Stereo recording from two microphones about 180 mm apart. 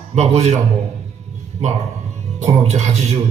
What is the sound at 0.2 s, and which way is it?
Speech, 40° right (ahead or behind).